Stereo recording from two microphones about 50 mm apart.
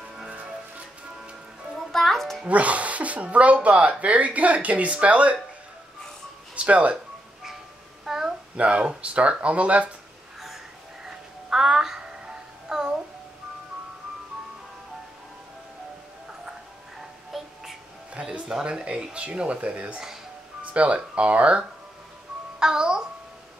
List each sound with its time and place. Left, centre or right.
0.3 s music: right
1.9 s music: centre
2.4 s speech: right
6.5 s speech: right
8.0 s a sound: centre
8.5 s speech: right
11.1 s music: centre
17.3 s music: centre
18.5 s speech: centre
22.6 s music: centre